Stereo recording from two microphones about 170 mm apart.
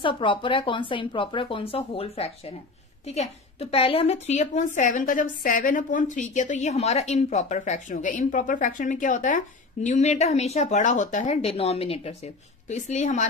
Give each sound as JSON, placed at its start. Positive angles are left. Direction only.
{"t": 0.0, "sound": "a woman's voice", "side_deg": 30}